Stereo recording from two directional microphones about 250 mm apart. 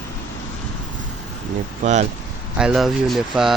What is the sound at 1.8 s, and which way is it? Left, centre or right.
Speech, right.